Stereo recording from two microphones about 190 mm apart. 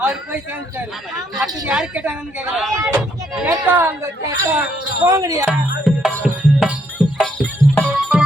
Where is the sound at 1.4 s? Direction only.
5° right (ahead or behind).